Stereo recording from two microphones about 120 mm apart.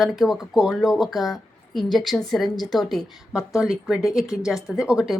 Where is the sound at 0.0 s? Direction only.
Centre (ahead or behind).